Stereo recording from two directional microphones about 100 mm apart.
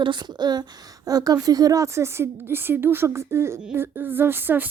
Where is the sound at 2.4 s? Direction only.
20° right (ahead or behind).